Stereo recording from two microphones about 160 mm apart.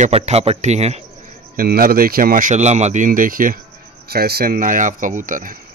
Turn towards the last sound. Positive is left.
turn(degrees=-55)  # may be behind; listen again after turning